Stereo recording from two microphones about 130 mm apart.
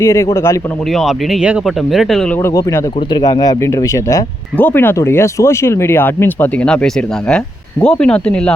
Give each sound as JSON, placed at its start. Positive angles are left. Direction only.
{"t": 0.0, "sound": "speech", "side_deg": 20}
{"t": 0.9, "sound": "speech", "side_deg": 0}
{"t": 2.4, "sound": "speech", "side_deg": 25}
{"t": 3.1, "sound": "speech", "side_deg": 35}
{"t": 4.5, "sound": "speech", "side_deg": 15}